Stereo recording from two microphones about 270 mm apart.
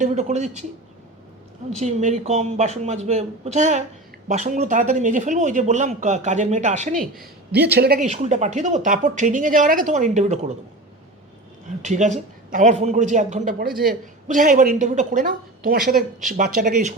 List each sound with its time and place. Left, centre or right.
0.0 s a woman's voice: right
1.7 s a woman's voice: right
11.8 s a woman's voice: right